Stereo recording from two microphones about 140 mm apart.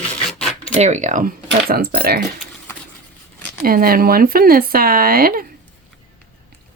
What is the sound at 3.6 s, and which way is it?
Speech, 90° right.